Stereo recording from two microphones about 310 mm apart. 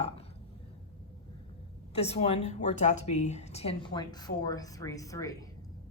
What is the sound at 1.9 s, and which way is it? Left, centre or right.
A woman's voice, centre.